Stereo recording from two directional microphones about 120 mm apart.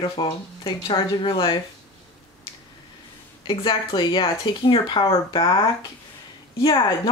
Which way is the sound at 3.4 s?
45° left (ahead or behind).